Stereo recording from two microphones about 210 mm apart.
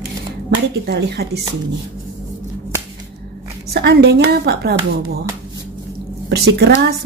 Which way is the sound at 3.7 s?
50° right (ahead or behind).